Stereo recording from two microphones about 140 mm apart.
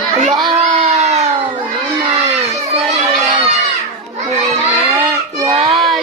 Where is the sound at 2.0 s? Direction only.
35° right (ahead or behind).